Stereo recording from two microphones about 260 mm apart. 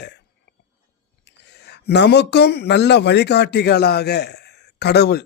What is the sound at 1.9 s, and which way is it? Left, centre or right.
Speech, left.